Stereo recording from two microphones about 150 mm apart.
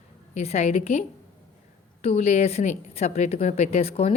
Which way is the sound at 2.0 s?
45° left (ahead or behind).